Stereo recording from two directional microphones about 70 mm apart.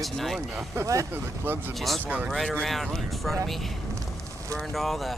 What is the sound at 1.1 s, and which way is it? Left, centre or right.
Speech, right.